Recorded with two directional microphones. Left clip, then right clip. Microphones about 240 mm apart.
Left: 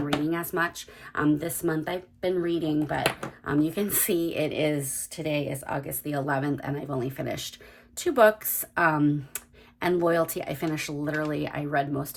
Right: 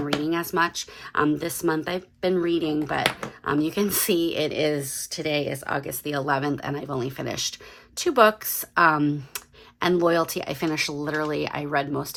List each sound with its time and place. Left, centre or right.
0.3 s speech: centre